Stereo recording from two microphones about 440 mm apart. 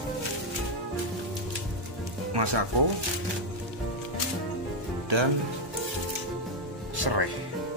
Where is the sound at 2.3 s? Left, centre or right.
Right.